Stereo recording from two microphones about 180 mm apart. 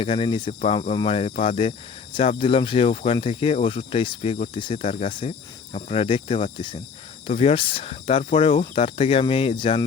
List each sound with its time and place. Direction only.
0.0 s speech: 30° left (ahead or behind)